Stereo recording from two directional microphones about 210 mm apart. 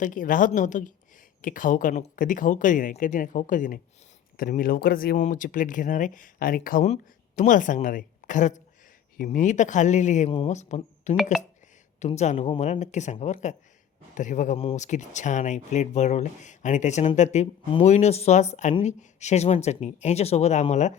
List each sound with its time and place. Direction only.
0.0 s speech: 40° left (ahead or behind)